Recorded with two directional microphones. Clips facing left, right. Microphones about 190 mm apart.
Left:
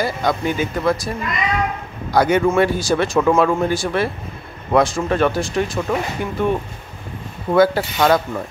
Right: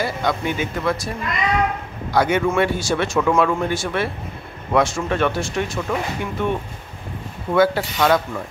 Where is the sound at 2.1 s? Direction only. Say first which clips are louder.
Left 3 dB; 40° left (ahead or behind).